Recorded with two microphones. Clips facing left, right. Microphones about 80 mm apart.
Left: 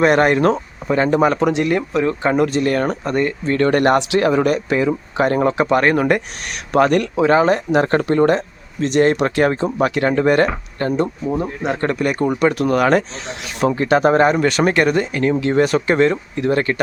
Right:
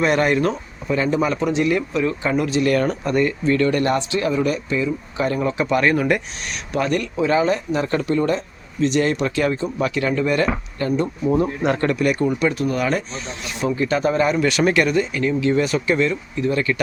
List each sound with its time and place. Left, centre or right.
0.0 s speech: left
3.7 s speech: left
6.7 s speech: left
11.3 s speech: left
11.9 s speech: left
12.4 s speech: left
13.6 s speech: left